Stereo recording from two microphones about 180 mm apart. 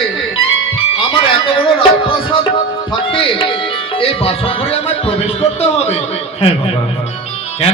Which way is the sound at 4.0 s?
30° left (ahead or behind).